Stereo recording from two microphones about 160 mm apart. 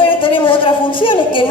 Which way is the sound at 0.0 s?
30° left (ahead or behind).